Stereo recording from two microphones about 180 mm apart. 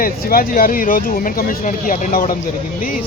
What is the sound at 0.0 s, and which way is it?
Speech, 55° left (ahead or behind).